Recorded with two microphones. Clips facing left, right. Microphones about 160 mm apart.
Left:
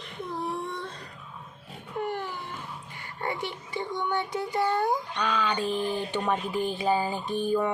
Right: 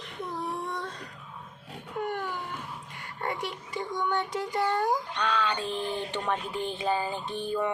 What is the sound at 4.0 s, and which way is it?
Child singing, 25° left (ahead or behind).